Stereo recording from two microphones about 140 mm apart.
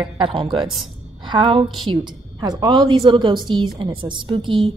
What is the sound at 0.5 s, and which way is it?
Speech, centre (ahead or behind).